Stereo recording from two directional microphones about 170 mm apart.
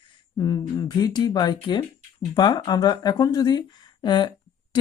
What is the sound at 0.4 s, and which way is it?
Speech, 25° left (ahead or behind).